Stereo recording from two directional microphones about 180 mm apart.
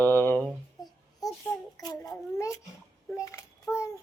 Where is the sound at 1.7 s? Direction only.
20° left (ahead or behind).